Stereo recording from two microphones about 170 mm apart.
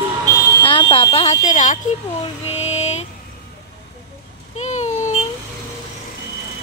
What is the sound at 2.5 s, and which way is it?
Mantra, 40° left (ahead or behind).